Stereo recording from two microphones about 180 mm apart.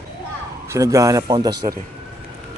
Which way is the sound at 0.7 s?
15° right (ahead or behind).